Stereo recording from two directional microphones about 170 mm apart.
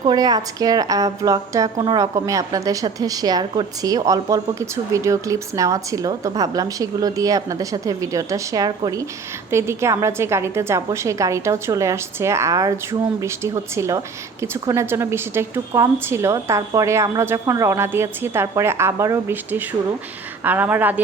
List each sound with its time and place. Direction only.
0.0 s a woman's voice: 25° right (ahead or behind); by 21.0 s 10° right (ahead or behind)